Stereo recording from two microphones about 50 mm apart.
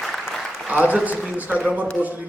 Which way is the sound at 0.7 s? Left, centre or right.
Right.